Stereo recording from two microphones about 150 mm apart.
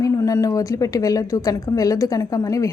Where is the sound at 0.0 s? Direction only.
20° left (ahead or behind).